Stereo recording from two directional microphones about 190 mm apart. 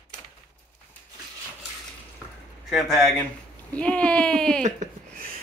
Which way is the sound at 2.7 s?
Centre (ahead or behind).